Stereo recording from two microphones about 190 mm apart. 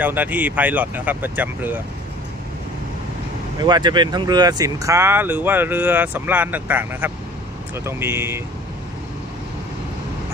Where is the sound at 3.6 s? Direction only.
20° right (ahead or behind).